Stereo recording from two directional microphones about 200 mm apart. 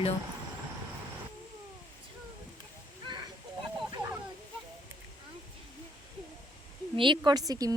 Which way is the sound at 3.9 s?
10° right (ahead or behind).